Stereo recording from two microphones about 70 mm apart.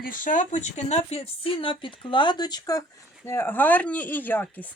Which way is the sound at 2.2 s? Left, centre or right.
Left.